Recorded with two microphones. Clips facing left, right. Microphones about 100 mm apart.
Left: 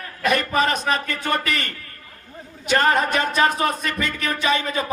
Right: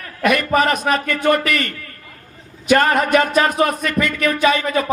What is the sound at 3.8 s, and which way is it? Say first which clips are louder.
A man's voice: right 6 dB; 30° left (ahead or behind).